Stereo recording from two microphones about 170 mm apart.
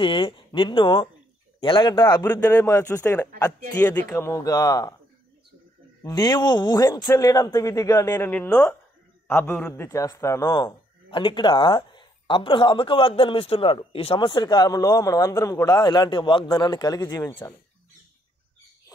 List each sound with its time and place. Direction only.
0.0 s a man's voice: 30° left (ahead or behind)
2.4 s a man's voice: 15° left (ahead or behind)
6.0 s a man's voice: 25° left (ahead or behind)